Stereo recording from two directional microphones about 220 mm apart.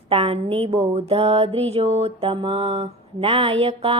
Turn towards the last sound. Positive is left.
turn(degrees=-25)  # may be behind; listen again after turning